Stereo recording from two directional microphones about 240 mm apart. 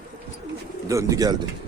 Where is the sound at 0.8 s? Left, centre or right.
Centre.